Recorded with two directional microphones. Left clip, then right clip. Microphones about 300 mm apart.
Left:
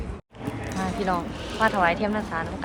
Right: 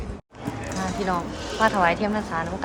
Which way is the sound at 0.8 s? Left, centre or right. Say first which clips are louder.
Even; centre.